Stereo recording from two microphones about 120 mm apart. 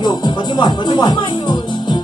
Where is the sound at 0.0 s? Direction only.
35° left (ahead or behind).